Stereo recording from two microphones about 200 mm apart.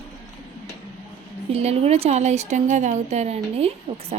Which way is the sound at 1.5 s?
30° right (ahead or behind).